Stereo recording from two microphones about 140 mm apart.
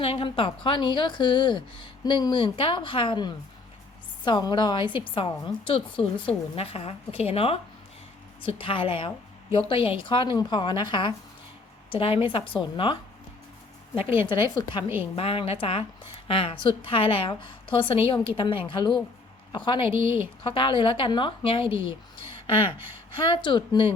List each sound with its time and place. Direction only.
0.0 s a woman's voice: 40° left (ahead or behind)
14.0 s a woman's voice: 15° right (ahead or behind)
14.3 s a woman's voice: 35° left (ahead or behind)
23.1 s a woman's voice: 35° left (ahead or behind)